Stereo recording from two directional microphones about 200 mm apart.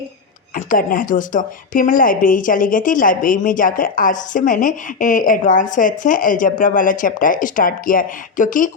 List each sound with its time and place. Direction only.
0.5 s speech: 45° left (ahead or behind)